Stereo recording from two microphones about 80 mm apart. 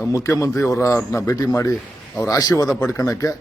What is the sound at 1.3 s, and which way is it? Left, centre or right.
A man's voice, left.